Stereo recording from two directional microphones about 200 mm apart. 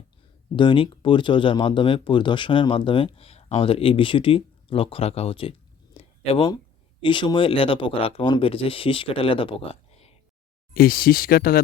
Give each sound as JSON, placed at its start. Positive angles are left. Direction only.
{"t": 0.5, "sound": "speech", "side_deg": 25}
{"t": 10.8, "sound": "speech", "side_deg": 45}